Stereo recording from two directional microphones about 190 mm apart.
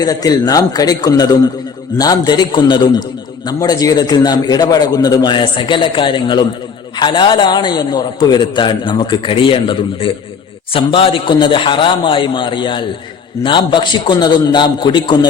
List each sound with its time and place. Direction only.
0.0 s a man's voice: 20° left (ahead or behind)